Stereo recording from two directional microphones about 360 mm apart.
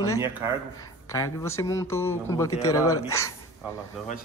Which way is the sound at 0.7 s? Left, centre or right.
Centre.